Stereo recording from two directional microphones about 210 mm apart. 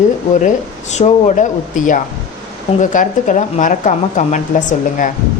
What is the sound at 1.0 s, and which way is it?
Speech, 35° left (ahead or behind).